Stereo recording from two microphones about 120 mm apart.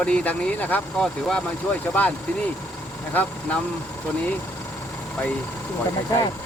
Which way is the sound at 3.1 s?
15° left (ahead or behind).